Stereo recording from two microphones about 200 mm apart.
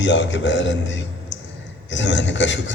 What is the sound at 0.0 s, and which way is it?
A man's voice, 65° left (ahead or behind).